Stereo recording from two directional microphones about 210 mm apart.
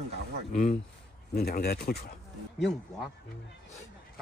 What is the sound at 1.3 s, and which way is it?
Speech, 45° left (ahead or behind).